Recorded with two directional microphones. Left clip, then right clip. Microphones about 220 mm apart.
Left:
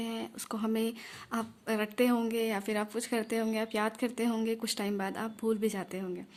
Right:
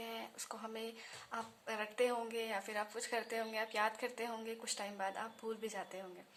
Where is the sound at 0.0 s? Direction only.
30° left (ahead or behind).